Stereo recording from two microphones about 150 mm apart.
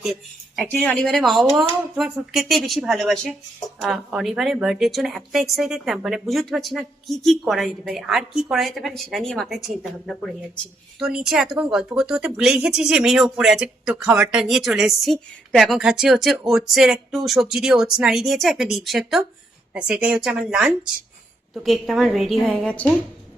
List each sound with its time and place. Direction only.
0.0 s speech: centre (ahead or behind)
0.6 s a woman's voice: 10° left (ahead or behind)